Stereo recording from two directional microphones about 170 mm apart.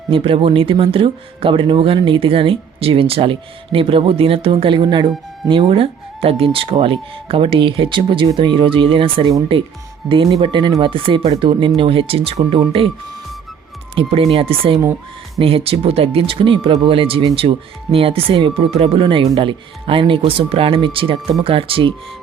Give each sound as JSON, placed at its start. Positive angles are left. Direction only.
{"t": 0.1, "sound": "speech", "side_deg": -30}
{"t": 13.9, "sound": "speech", "side_deg": -35}